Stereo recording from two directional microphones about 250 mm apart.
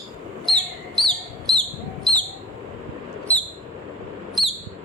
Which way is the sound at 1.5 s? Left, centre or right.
Centre.